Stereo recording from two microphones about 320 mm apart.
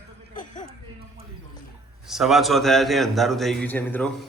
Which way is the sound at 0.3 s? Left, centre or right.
Left.